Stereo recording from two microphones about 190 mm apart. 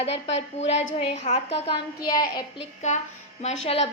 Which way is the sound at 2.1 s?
20° left (ahead or behind).